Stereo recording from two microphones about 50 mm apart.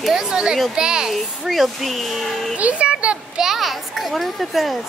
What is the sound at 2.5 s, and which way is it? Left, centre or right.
Speech, right.